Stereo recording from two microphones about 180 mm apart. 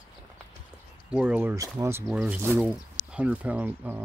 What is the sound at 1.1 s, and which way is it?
Speech, 10° right (ahead or behind).